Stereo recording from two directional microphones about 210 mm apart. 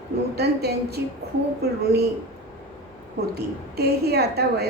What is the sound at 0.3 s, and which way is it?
A woman's voice, 50° right (ahead or behind).